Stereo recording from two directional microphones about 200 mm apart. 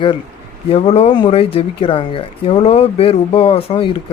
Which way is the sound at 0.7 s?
30° left (ahead or behind).